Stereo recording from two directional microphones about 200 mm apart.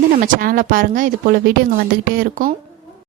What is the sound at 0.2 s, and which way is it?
Speech, 45° right (ahead or behind).